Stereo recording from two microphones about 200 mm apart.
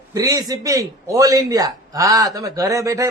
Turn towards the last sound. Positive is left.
turn(degrees=-15)  # may be behind; listen again after turning